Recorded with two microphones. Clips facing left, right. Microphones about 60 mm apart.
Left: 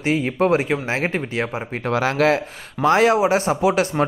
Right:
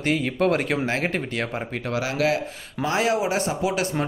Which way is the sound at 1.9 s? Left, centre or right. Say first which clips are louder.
Left 6 dB; left.